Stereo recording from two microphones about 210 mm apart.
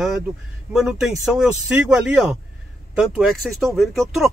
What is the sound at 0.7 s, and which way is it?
Speech, centre (ahead or behind).